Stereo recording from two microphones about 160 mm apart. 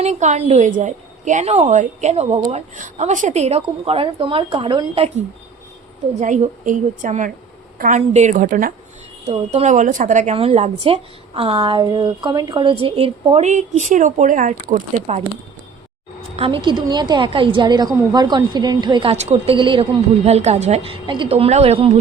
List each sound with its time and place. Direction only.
0.0 s a woman's voice: 45° right (ahead or behind)
6.1 s a woman's voice: 45° right (ahead or behind)
9.2 s a woman's voice: 40° right (ahead or behind)
16.3 s a woman's voice: 35° right (ahead or behind)
19.1 s a woman's voice: 40° right (ahead or behind)